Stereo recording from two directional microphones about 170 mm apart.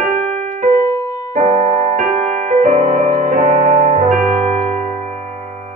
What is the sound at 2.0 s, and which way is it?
Music, 40° right (ahead or behind).